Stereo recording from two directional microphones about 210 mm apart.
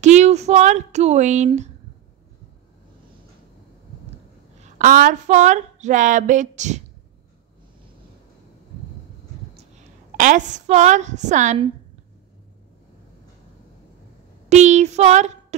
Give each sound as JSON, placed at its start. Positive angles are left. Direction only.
{"t": 0.0, "sound": "a sound", "side_deg": -35}
{"t": 4.7, "sound": "speech", "side_deg": -40}
{"t": 10.1, "sound": "speech", "side_deg": -35}
{"t": 14.5, "sound": "speech", "side_deg": -35}